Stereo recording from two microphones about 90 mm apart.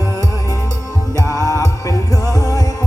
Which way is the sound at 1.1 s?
40° left (ahead or behind).